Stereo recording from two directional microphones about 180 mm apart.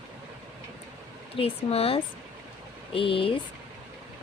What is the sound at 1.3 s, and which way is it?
Speech, 30° left (ahead or behind).